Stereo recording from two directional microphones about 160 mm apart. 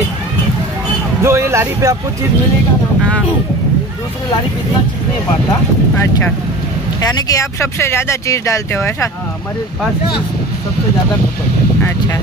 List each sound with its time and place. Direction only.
1.2 s speech: 15° right (ahead or behind)
7.0 s speech: 25° left (ahead or behind)